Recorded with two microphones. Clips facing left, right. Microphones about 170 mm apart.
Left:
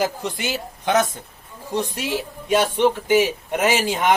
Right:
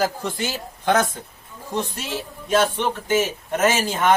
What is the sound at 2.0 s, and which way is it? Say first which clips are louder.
Speech: left 3 dB; 15° left (ahead or behind).